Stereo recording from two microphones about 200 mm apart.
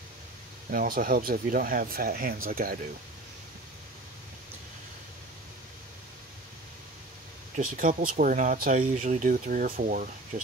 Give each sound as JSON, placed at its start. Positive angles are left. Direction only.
{"t": 0.7, "sound": "speech", "side_deg": -45}
{"t": 7.5, "sound": "speech", "side_deg": -40}